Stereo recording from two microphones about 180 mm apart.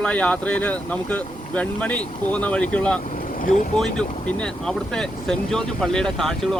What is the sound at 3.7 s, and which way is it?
Speech, 5° left (ahead or behind).